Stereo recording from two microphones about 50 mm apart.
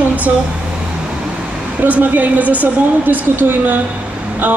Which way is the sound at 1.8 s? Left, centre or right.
Right.